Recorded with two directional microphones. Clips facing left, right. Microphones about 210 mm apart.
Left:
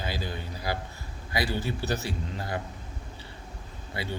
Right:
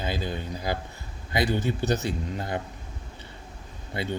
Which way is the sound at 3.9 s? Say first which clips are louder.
Right 4 dB; 20° right (ahead or behind).